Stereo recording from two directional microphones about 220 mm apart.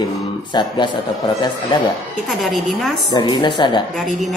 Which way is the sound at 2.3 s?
Centre (ahead or behind).